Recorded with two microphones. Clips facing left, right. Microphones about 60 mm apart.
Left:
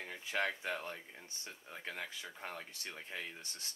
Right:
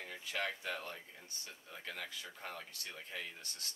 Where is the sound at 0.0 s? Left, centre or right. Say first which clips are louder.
Left 3 dB; left.